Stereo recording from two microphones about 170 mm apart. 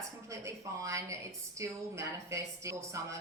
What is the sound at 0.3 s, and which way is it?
A woman's voice, 20° right (ahead or behind).